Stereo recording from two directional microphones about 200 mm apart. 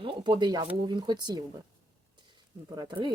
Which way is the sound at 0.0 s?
20° right (ahead or behind).